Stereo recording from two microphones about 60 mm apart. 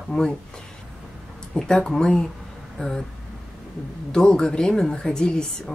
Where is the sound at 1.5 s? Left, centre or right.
Centre.